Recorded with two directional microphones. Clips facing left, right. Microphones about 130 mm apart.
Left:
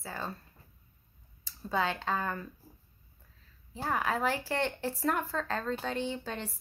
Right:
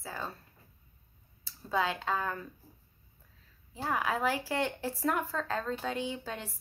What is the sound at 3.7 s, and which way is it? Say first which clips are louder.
Speech: even; 5° right (ahead or behind).